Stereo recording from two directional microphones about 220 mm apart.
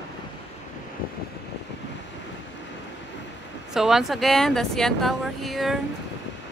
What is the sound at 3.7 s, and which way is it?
Speech, centre (ahead or behind).